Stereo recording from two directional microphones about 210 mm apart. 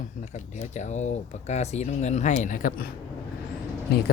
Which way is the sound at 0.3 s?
35° left (ahead or behind).